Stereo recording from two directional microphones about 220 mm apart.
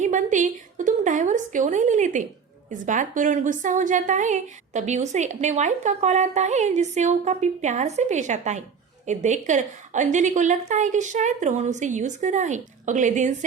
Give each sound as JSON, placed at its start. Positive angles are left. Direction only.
{"t": 0.0, "sound": "a woman's voice", "side_deg": -35}